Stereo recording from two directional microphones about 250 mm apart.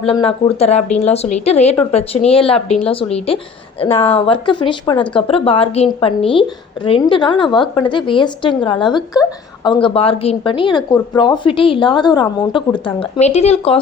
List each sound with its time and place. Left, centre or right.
0.0 s a woman's voice: left